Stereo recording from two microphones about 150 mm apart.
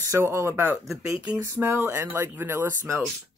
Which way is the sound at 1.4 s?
20° right (ahead or behind).